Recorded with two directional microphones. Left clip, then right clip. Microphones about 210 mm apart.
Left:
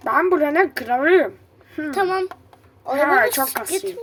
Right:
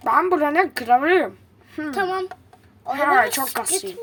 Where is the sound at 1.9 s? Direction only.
15° left (ahead or behind).